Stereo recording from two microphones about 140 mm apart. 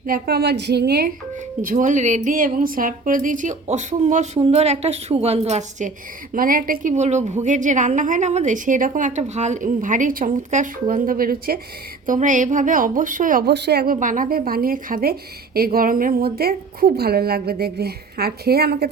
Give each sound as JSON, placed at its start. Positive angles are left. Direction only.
{"t": 0.0, "sound": "a woman's voice", "side_deg": -90}
{"t": 1.6, "sound": "a woman's voice", "side_deg": -65}
{"t": 4.4, "sound": "a woman's voice", "side_deg": -45}
{"t": 6.3, "sound": "a woman's voice", "side_deg": -90}
{"t": 6.9, "sound": "a woman's voice", "side_deg": -55}
{"t": 12.0, "sound": "a woman's voice", "side_deg": -65}